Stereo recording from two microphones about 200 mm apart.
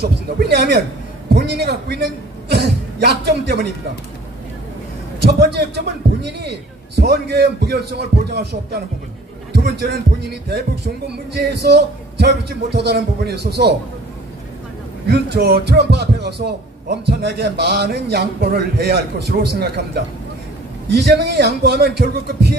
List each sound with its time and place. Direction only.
0.0 s speech: 55° right (ahead or behind)
5.2 s a man's voice: 55° right (ahead or behind)
11.6 s speech: 55° right (ahead or behind)
15.0 s speech: 55° right (ahead or behind)
20.9 s speech: 55° right (ahead or behind)